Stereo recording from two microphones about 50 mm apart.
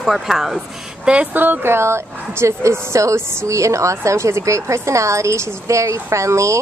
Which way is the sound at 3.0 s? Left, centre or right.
Right.